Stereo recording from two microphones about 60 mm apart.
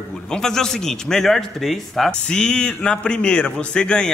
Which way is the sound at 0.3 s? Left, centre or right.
Centre.